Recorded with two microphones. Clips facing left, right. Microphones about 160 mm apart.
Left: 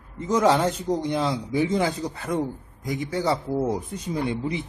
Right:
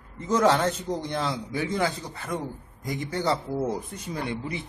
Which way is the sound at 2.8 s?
Centre (ahead or behind).